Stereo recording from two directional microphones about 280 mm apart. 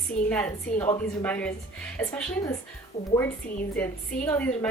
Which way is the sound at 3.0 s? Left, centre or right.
Left.